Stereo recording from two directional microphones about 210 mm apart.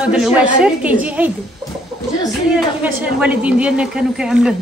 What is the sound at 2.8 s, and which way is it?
A woman's voice, 5° right (ahead or behind).